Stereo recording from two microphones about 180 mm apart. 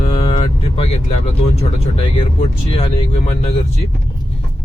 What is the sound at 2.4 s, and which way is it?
Speech, 35° left (ahead or behind).